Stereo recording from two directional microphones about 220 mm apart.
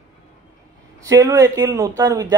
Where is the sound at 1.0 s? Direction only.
15° right (ahead or behind).